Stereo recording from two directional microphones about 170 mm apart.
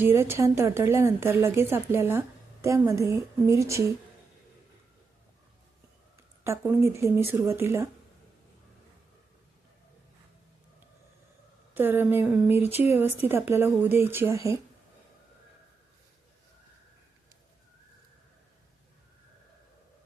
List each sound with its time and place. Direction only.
0.0 s a woman's voice: 15° right (ahead or behind)
6.1 s a woman's voice: 15° right (ahead or behind)
11.7 s a woman's voice: 10° right (ahead or behind)